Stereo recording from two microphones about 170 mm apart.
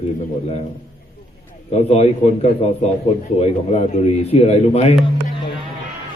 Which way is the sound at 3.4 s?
40° left (ahead or behind).